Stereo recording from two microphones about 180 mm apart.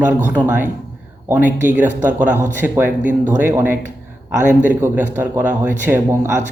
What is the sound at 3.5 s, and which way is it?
Speech, 15° right (ahead or behind).